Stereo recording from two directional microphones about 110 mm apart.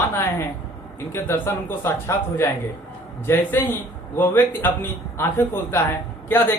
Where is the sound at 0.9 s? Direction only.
25° left (ahead or behind).